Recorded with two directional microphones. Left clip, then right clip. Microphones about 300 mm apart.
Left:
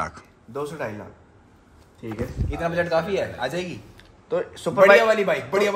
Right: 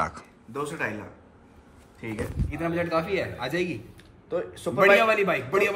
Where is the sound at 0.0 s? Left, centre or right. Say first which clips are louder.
Right 1 dB; centre.